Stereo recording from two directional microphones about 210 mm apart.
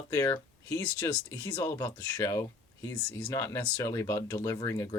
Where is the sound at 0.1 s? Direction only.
15° left (ahead or behind).